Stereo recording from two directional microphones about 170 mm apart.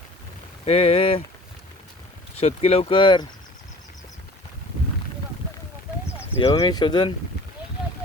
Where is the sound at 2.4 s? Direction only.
35° left (ahead or behind).